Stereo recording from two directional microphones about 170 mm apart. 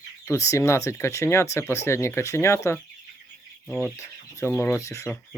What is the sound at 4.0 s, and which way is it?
Speech, 15° left (ahead or behind).